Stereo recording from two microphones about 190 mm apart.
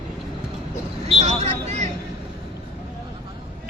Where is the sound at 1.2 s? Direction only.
35° right (ahead or behind).